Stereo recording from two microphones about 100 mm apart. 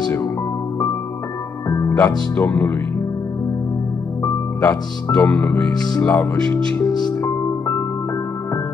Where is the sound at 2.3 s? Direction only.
20° left (ahead or behind).